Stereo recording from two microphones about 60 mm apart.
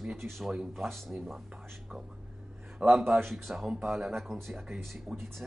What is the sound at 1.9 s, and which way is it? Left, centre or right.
Speech, right.